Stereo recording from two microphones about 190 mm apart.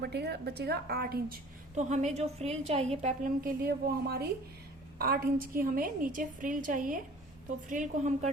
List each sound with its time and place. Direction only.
0.0 s a woman's voice: 60° right (ahead or behind)
1.7 s a woman's voice: 40° right (ahead or behind)